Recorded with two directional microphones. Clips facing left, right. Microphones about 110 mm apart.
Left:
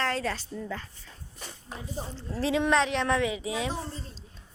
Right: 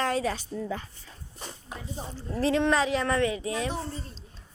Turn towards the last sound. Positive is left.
turn(degrees=5)  # may be behind; listen again after turning